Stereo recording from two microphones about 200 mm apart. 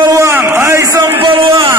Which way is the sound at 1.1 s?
25° right (ahead or behind).